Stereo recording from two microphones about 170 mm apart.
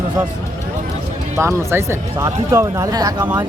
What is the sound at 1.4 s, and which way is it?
Speech, 15° right (ahead or behind).